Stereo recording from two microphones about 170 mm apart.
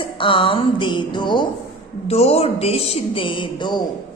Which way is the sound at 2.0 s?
35° left (ahead or behind).